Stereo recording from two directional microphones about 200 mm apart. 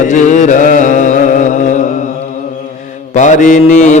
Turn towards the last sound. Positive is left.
turn(degrees=35)  # may be behind; listen again after turning